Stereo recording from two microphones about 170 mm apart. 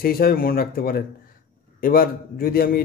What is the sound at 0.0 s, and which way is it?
A man's voice, 60° left (ahead or behind).